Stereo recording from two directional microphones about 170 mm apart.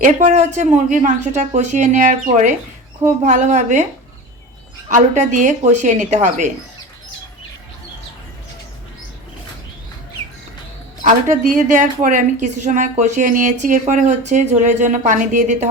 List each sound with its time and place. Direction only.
0.0 s a woman's voice: 45° right (ahead or behind)
4.9 s a woman's voice: 45° right (ahead or behind)
11.0 s a woman's voice: 45° right (ahead or behind)